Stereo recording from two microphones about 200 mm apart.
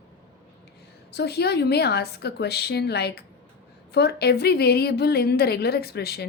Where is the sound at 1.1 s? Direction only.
55° left (ahead or behind).